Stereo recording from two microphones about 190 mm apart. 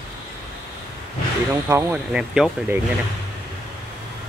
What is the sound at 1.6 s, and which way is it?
Speech, 10° right (ahead or behind).